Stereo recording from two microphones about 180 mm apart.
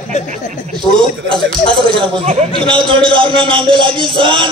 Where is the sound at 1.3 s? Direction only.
30° right (ahead or behind).